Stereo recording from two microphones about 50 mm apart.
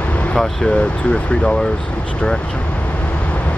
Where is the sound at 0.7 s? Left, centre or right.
Centre.